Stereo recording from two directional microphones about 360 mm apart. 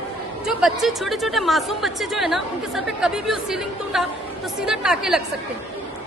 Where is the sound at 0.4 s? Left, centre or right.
Centre.